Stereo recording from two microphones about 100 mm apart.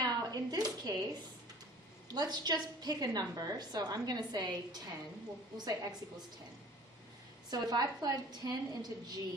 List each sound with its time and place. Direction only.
0.0 s a sound: 40° right (ahead or behind)
2.1 s a woman's voice: 45° right (ahead or behind)
7.5 s a woman's voice: 40° right (ahead or behind)